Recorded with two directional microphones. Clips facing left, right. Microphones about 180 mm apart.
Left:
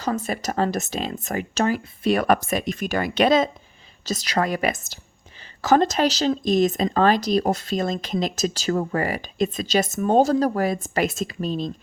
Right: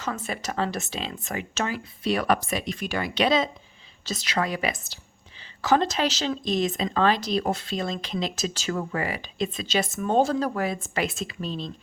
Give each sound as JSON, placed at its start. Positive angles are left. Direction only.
{"t": 0.0, "sound": "speech", "side_deg": 40}